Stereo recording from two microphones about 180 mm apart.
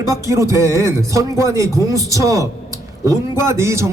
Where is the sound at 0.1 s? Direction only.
15° right (ahead or behind).